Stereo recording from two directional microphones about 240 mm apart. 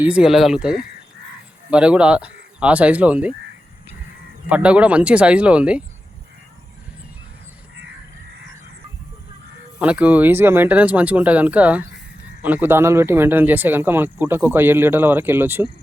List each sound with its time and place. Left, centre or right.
0.0 s speech: centre
4.4 s speech: centre
9.7 s speech: centre